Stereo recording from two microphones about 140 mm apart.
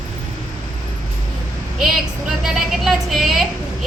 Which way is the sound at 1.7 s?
5° right (ahead or behind).